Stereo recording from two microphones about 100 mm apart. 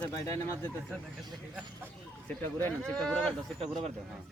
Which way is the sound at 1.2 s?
Centre (ahead or behind).